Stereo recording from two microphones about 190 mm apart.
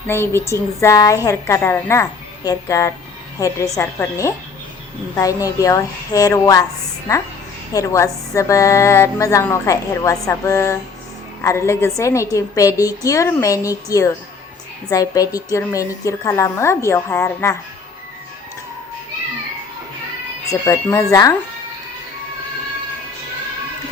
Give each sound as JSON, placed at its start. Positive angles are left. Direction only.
{"t": 0.1, "sound": "a woman's voice", "side_deg": 15}
{"t": 7.7, "sound": "a woman's voice", "side_deg": 15}
{"t": 20.5, "sound": "a woman's voice", "side_deg": 15}